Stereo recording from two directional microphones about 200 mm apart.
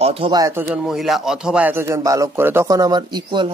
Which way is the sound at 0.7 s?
5° right (ahead or behind).